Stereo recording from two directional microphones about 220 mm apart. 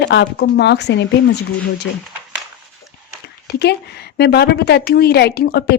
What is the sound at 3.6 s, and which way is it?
A woman's voice, 50° left (ahead or behind).